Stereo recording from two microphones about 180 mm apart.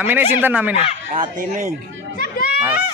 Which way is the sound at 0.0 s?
10° right (ahead or behind).